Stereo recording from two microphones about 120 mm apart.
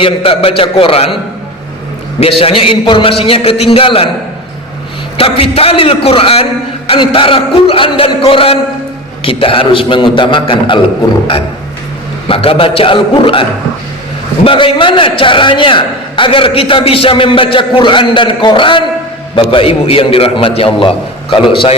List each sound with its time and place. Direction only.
0.0 s a man's voice: 50° left (ahead or behind)
2.4 s a man's voice: 50° left (ahead or behind)
5.1 s a man's voice: 50° left (ahead or behind)
12.3 s a man's voice: 50° left (ahead or behind)
14.4 s a man's voice: 45° left (ahead or behind)